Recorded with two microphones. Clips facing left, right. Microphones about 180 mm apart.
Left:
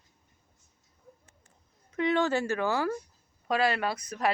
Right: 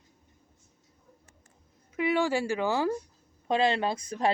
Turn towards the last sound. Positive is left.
turn(degrees=-25)  # may be behind; listen again after turning